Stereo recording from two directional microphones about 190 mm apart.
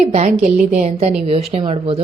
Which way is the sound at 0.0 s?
35° right (ahead or behind).